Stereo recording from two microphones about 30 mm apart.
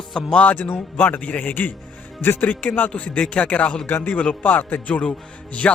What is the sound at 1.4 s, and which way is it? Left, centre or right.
Speech, left.